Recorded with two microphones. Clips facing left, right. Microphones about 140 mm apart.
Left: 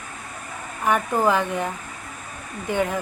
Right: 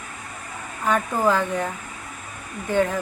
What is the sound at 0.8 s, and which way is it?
Speech, 15° left (ahead or behind).